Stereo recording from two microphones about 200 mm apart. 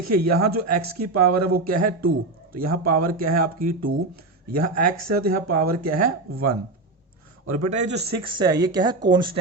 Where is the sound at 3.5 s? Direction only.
45° right (ahead or behind).